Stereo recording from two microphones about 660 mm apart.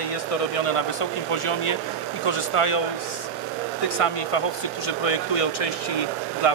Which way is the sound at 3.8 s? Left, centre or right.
Left.